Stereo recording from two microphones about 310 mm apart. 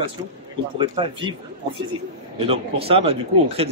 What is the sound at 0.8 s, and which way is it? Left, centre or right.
Speech, centre.